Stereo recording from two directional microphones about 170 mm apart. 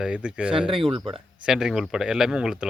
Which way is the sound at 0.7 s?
30° right (ahead or behind).